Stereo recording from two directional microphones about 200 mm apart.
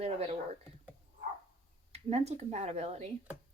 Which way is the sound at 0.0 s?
30° right (ahead or behind).